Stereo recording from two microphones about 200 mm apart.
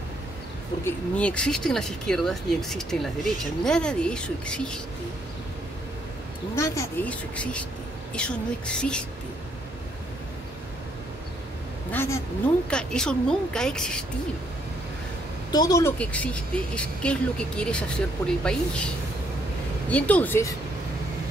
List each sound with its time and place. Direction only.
0.8 s speech: 5° left (ahead or behind)
6.5 s speech: 15° left (ahead or behind)
11.9 s speech: 10° left (ahead or behind)
15.5 s speech: 20° left (ahead or behind)
16.0 s speech: 5° left (ahead or behind)
19.9 s speech: 5° left (ahead or behind)